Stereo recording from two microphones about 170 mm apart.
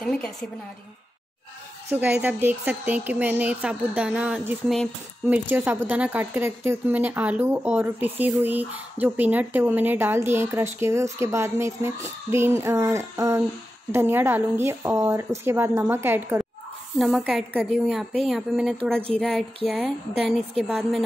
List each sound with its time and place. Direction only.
1.9 s speech: 10° right (ahead or behind)
17.0 s speech: centre (ahead or behind)